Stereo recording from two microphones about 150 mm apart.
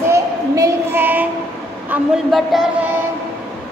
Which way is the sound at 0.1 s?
20° right (ahead or behind).